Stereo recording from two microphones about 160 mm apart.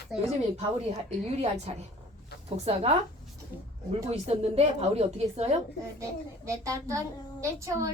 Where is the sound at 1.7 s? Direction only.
40° right (ahead or behind).